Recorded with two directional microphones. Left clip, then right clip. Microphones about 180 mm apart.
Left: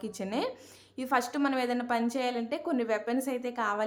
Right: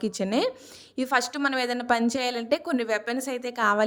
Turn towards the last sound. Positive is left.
turn(degrees=-35)  # may be behind; listen again after turning